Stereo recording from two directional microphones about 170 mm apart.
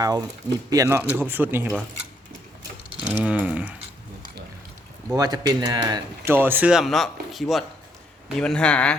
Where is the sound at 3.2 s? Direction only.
10° right (ahead or behind).